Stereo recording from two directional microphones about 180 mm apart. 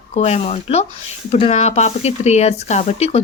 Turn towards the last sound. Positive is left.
turn(degrees=35)  # may be behind; listen again after turning